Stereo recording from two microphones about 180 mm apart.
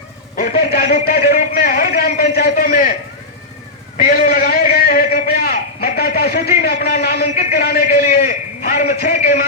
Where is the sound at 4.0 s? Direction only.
55° left (ahead or behind).